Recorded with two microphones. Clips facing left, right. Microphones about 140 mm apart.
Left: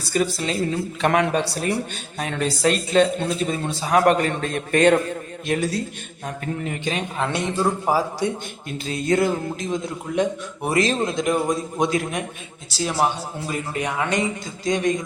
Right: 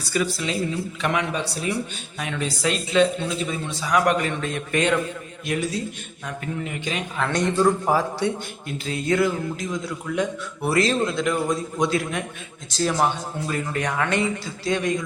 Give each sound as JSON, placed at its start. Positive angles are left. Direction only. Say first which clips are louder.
{"t": 0.1, "sound": "a woman's voice", "louder": "left 2 dB", "side_deg": 40}
{"t": 6.2, "sound": "a man's voice", "louder": "left 2 dB", "side_deg": 40}
{"t": 7.3, "sound": "a man's voice", "louder": "right 5 dB", "side_deg": 5}
{"t": 8.9, "sound": "a man's voice", "louder": "left 1 dB", "side_deg": 40}
{"t": 9.6, "sound": "a man's voice", "louder": "left 2 dB", "side_deg": 25}
{"t": 12.7, "sound": "a man's voice", "louder": "even", "side_deg": 10}